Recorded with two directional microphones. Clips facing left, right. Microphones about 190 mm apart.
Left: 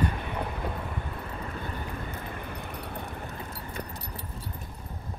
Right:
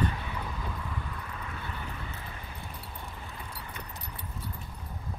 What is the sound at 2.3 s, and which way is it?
Dog, 60° left (ahead or behind).